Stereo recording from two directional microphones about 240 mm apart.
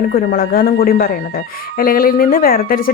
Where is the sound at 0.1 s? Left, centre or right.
Left.